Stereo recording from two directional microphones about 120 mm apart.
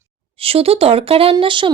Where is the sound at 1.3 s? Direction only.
40° right (ahead or behind).